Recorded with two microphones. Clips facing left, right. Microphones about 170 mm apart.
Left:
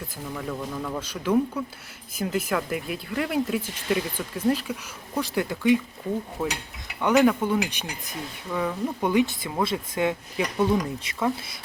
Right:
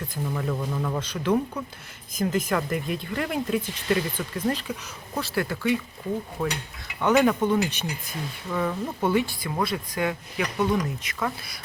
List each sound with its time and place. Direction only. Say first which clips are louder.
0.3 s speech: right 1 dB; centre (ahead or behind)
0.9 s dishes: right 2 dB; 10° left (ahead or behind)
2.1 s speech: right 1 dB; 10° left (ahead or behind)
6.4 s speech: right 1 dB; centre (ahead or behind)
7.0 s dishes: even; 10° left (ahead or behind)
9.6 s speech: left 2 dB; 25° left (ahead or behind)